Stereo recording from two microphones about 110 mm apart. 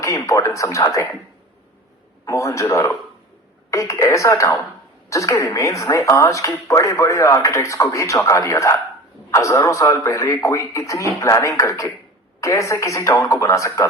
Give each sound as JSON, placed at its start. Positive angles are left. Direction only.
{"t": 0.0, "sound": "speech", "side_deg": 30}
{"t": 2.2, "sound": "speech", "side_deg": 30}